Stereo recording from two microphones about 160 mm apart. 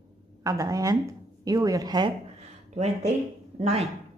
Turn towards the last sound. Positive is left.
turn(degrees=-40)  # may be behind; listen again after turning